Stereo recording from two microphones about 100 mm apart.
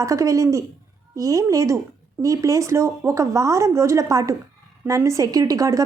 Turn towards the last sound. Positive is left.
turn(degrees=-35)  # may be behind; listen again after turning